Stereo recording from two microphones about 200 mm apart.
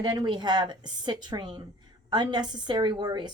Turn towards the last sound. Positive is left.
turn(degrees=-20)  # may be behind; listen again after turning